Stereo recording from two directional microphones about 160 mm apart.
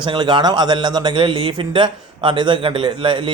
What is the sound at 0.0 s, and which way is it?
A man's voice, 30° right (ahead or behind).